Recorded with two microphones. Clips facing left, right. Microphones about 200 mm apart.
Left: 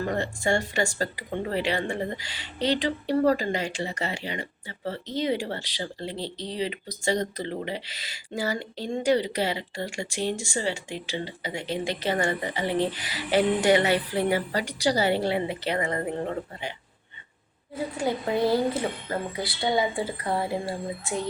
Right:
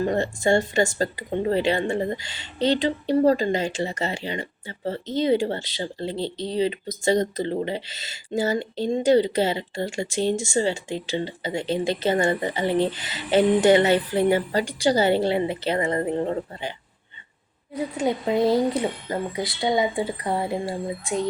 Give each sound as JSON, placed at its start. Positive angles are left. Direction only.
{"t": 0.0, "sound": "speech", "side_deg": -25}
{"t": 17.7, "sound": "speech", "side_deg": -20}